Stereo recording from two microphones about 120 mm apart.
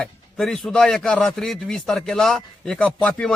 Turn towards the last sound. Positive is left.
turn(degrees=5)  # may be behind; listen again after turning